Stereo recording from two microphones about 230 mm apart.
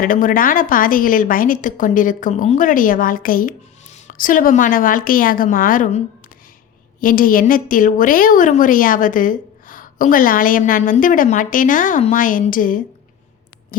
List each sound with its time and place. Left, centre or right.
0.0 s a woman's voice: left